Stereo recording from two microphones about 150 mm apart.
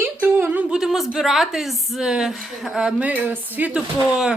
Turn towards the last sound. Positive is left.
turn(degrees=-5)  # may be behind; listen again after turning